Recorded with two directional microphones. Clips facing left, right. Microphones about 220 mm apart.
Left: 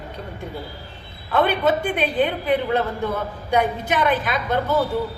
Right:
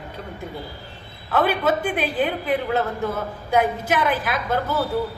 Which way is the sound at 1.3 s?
5° right (ahead or behind).